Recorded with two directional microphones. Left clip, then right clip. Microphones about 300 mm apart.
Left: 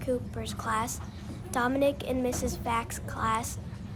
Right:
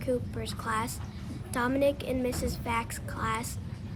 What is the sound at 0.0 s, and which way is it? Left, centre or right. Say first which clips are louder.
Speech: even; centre.